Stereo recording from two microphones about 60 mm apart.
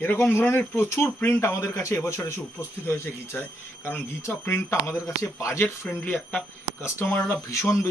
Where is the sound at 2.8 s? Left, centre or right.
Left.